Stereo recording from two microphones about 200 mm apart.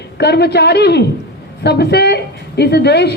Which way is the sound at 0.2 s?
55° left (ahead or behind).